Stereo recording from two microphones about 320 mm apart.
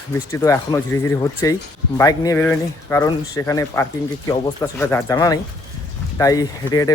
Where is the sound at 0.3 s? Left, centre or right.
Centre.